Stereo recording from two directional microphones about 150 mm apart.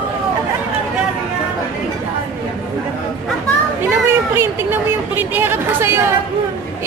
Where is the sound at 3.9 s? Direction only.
15° right (ahead or behind).